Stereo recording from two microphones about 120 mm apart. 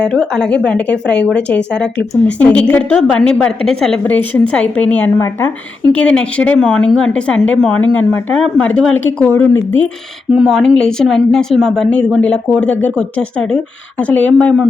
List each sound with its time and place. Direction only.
0.0 s a woman's voice: 5° left (ahead or behind)
10.3 s a woman's voice: centre (ahead or behind)